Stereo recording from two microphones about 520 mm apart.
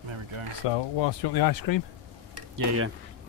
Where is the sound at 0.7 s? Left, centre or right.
Left.